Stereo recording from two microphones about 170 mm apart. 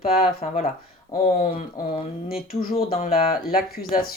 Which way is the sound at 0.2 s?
45° left (ahead or behind).